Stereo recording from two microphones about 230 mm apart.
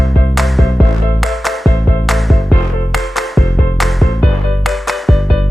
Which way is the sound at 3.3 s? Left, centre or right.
Centre.